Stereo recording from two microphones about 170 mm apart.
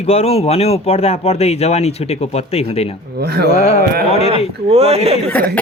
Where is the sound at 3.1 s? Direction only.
65° right (ahead or behind).